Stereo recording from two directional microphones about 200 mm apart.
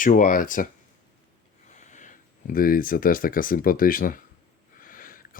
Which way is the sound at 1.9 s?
40° left (ahead or behind).